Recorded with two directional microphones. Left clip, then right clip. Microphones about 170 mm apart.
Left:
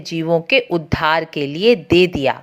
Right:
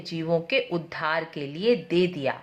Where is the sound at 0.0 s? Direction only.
35° left (ahead or behind).